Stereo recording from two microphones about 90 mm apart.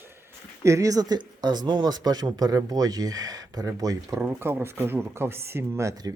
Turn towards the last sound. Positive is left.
turn(degrees=-40)  # may be behind; listen again after turning